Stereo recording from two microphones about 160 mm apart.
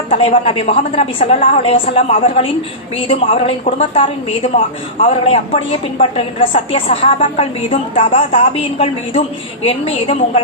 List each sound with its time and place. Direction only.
0.1 s a woman's voice: 35° left (ahead or behind)
9.6 s a woman's voice: 35° left (ahead or behind)